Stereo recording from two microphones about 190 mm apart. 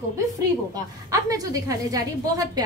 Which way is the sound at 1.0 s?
20° right (ahead or behind).